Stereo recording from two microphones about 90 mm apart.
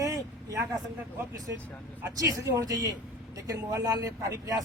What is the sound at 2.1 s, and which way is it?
Speech, 40° right (ahead or behind).